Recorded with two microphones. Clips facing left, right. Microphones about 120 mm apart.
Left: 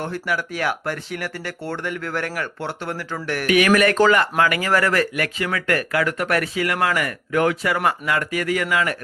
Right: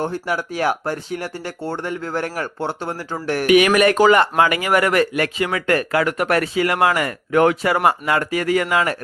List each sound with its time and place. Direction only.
0.0 s speech: 30° right (ahead or behind)
3.4 s speech: 20° right (ahead or behind)